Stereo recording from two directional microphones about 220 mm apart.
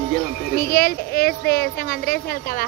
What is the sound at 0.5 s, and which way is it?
Speech, 40° left (ahead or behind).